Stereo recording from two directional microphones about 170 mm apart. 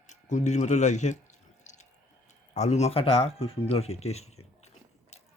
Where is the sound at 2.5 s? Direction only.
40° left (ahead or behind).